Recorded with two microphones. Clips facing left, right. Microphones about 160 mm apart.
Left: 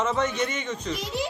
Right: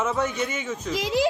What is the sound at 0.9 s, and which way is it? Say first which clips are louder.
Speech: right 7 dB; 90° right.